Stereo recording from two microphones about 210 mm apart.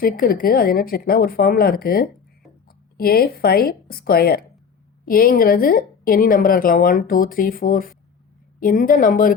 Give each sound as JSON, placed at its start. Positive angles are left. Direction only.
{"t": 0.0, "sound": "a woman's voice", "side_deg": 45}